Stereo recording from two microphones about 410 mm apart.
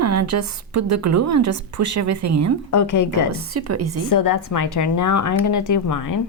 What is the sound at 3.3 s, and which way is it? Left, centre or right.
Speech, right.